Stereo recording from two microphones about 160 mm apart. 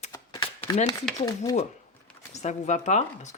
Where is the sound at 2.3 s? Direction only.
45° left (ahead or behind).